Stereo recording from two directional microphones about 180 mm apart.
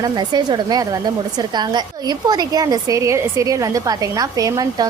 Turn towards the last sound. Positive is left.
turn(degrees=-20)  # may be behind; listen again after turning